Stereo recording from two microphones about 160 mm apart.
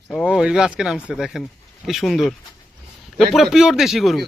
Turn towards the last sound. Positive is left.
turn(degrees=0)  # may be behind; listen again after turning